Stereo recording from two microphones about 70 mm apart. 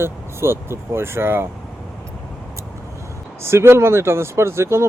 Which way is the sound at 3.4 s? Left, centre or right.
Right.